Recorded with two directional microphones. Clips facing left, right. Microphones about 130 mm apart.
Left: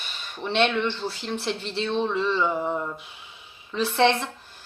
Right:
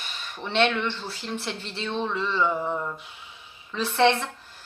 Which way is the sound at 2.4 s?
10° left (ahead or behind).